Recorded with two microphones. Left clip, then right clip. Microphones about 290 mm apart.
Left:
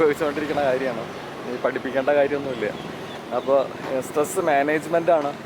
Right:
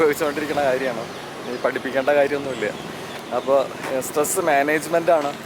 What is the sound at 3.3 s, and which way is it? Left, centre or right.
Speech, left.